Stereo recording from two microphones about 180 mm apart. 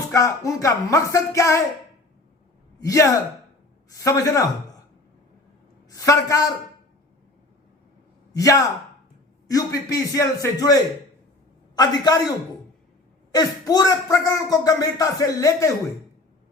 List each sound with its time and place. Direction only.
0.1 s music: 20° left (ahead or behind)
2.8 s music: 20° left (ahead or behind)
5.9 s music: 15° left (ahead or behind)
8.3 s a man's voice: 20° left (ahead or behind)
13.3 s speech: 20° left (ahead or behind)